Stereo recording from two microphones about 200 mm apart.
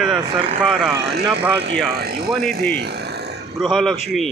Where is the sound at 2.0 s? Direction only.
55° right (ahead or behind).